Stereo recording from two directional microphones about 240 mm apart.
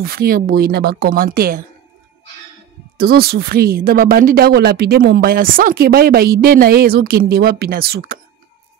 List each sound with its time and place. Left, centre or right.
0.0 s speech: right
3.0 s speech: right